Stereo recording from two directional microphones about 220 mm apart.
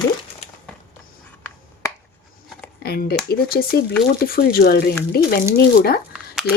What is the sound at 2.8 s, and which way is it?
Speech, 45° left (ahead or behind).